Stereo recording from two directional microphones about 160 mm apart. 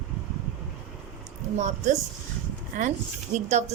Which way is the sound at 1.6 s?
45° right (ahead or behind).